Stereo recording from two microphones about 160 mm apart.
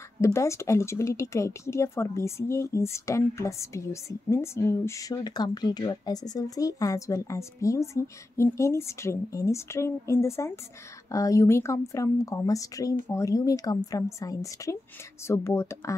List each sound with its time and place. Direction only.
0.2 s a woman's voice: 15° left (ahead or behind)